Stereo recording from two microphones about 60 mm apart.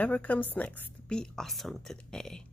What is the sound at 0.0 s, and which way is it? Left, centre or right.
Speech, left.